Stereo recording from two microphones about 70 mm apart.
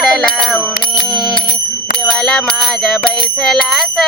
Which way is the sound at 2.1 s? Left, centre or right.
Centre.